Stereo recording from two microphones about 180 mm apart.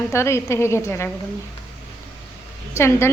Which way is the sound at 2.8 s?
15° left (ahead or behind).